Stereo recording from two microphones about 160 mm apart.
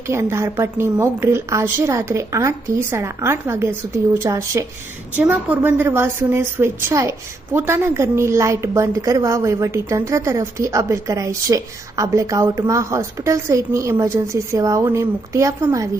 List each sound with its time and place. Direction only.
0.1 s a woman's voice: 15° right (ahead or behind)